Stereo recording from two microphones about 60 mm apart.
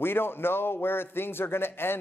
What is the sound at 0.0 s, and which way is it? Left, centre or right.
A man's voice, left.